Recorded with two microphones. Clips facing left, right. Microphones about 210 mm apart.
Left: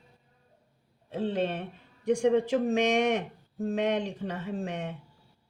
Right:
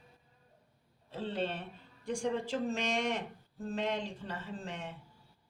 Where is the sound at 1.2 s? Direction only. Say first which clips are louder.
Left 7 dB; 60° left (ahead or behind).